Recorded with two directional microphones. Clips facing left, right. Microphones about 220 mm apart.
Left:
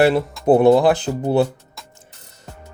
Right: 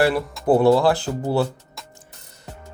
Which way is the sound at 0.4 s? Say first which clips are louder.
Left 3 dB; 20° left (ahead or behind).